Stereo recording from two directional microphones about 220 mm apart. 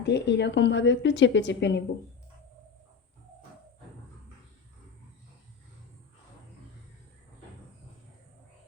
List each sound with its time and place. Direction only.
0.0 s a woman's voice: 50° left (ahead or behind)